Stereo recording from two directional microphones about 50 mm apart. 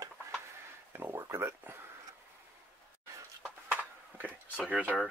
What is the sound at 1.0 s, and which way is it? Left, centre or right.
Speech, right.